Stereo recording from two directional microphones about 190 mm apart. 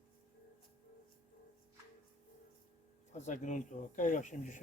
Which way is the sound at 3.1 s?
40° left (ahead or behind).